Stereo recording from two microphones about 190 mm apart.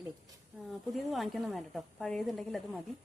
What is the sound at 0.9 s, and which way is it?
A woman's voice, centre (ahead or behind).